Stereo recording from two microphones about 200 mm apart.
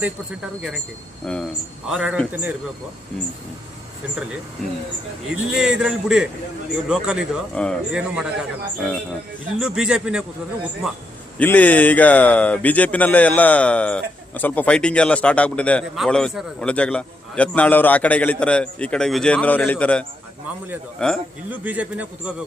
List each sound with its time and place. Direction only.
1.2 s a man's voice: 5° left (ahead or behind)
5.3 s a man's voice: 5° right (ahead or behind)
9.6 s a man's voice: 5° right (ahead or behind)
11.3 s a man's voice: 10° left (ahead or behind)
21.5 s a man's voice: 10° right (ahead or behind)